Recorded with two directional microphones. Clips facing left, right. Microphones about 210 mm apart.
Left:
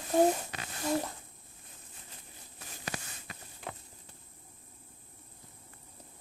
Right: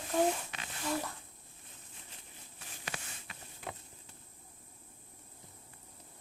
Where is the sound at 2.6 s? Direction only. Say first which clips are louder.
Left 4 dB; 40° left (ahead or behind).